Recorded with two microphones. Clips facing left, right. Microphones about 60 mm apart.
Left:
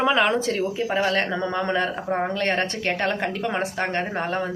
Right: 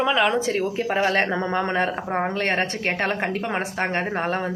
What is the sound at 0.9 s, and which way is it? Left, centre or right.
A woman's voice, right.